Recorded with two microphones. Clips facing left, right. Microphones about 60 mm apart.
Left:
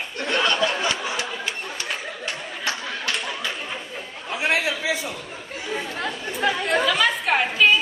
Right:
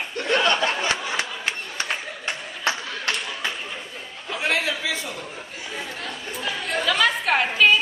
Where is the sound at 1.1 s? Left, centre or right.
Right.